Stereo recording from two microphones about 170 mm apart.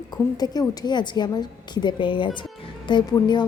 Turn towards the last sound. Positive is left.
turn(degrees=25)  # may be behind; listen again after turning